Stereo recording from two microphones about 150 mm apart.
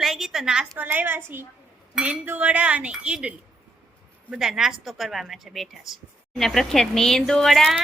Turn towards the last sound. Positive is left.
turn(degrees=0)  # may be behind; listen again after turning